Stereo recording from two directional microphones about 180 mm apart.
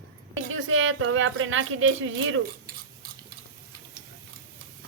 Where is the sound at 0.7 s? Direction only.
90° right.